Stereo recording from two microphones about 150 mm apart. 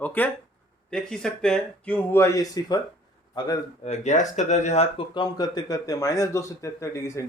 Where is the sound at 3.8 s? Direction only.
50° left (ahead or behind).